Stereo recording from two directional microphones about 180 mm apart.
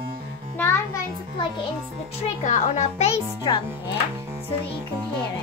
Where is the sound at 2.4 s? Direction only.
40° left (ahead or behind).